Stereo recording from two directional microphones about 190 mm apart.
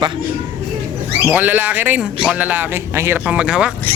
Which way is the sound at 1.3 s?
10° right (ahead or behind).